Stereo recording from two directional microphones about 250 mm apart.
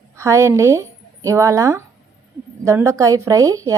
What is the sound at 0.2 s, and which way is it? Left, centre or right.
Speech, centre.